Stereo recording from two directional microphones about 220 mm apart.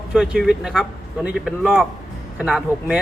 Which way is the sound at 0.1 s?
5° right (ahead or behind).